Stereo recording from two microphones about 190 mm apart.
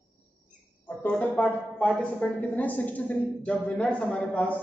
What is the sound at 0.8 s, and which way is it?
A woman's voice, 10° left (ahead or behind).